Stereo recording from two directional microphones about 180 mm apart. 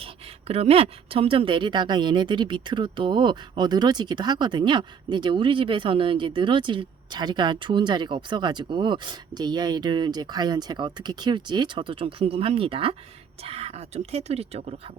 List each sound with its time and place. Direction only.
0.0 s a woman's voice: 35° right (ahead or behind)